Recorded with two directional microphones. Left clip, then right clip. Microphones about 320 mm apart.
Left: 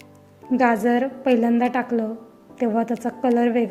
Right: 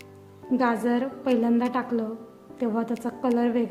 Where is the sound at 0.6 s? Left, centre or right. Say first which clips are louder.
Left 6 dB; centre.